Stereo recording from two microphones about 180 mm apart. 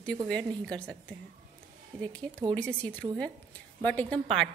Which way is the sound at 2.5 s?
5° left (ahead or behind).